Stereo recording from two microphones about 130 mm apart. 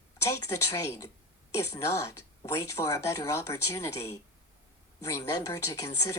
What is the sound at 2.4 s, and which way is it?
Speech, 20° left (ahead or behind).